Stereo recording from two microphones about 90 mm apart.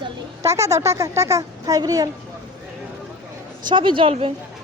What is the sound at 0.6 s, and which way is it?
Speech, 35° right (ahead or behind).